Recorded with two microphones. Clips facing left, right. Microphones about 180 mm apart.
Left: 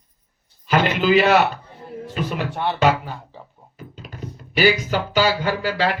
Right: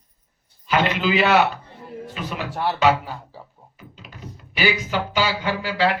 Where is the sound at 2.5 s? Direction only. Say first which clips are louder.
Even; 5° right (ahead or behind).